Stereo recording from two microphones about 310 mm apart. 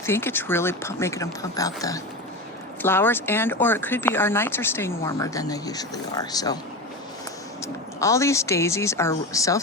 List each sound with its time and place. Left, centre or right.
0.0 s speech: centre
7.6 s speech: centre